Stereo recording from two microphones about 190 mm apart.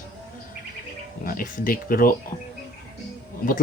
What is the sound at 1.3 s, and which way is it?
Speech, 45° left (ahead or behind).